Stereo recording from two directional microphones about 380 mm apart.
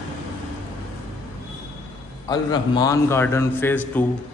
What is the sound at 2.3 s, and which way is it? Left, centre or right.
A man's voice, centre.